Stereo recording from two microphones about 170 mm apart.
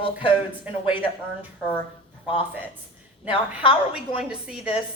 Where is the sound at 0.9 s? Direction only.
30° left (ahead or behind).